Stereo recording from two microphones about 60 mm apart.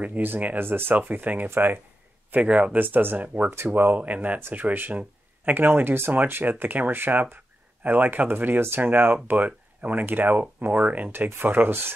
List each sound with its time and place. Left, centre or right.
0.0 s speech: right
2.3 s speech: right
2.8 s speech: right